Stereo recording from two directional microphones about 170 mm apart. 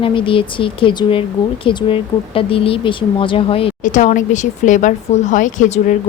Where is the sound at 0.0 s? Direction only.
30° left (ahead or behind).